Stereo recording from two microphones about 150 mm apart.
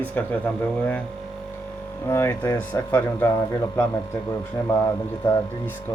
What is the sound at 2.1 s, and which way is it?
Speech, 15° left (ahead or behind).